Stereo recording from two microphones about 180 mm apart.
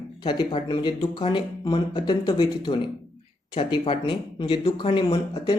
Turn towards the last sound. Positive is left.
turn(degrees=25)  # may be behind; listen again after turning